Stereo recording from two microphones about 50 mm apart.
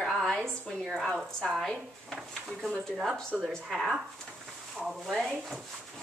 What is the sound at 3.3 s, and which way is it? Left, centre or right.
A woman's voice, centre.